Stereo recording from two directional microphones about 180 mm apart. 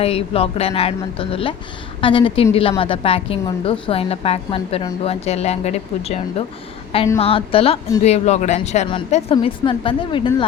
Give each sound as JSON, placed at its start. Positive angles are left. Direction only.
{"t": 0.0, "sound": "a woman's voice", "side_deg": 35}